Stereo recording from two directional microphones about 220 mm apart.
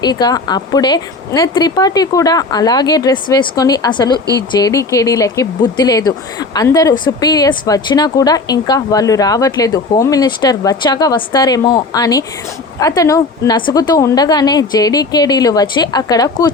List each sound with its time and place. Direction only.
0.0 s a woman's voice: 20° left (ahead or behind)